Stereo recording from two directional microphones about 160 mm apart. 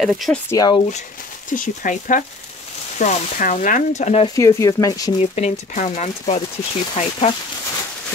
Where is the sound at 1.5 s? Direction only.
55° left (ahead or behind).